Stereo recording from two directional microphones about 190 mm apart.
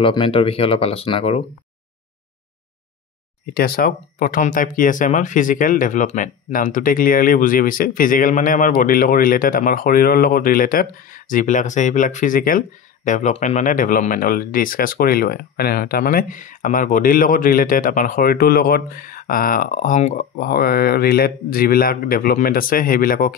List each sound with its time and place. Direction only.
0.0 s speech: 30° left (ahead or behind)
3.5 s speech: 50° left (ahead or behind)